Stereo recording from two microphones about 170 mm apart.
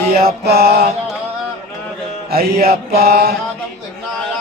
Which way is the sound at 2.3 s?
65° right (ahead or behind).